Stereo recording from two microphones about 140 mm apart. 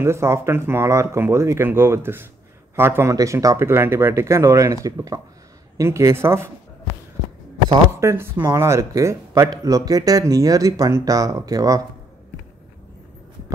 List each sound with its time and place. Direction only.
0.0 s speech: 20° right (ahead or behind)
7.7 s speech: 20° right (ahead or behind)